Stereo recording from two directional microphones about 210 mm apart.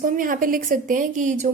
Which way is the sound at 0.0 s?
40° right (ahead or behind).